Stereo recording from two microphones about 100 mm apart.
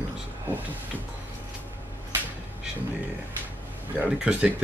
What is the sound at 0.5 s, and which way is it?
Speech, 20° right (ahead or behind).